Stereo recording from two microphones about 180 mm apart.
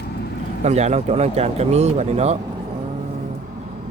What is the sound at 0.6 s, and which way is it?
Speech, 40° right (ahead or behind).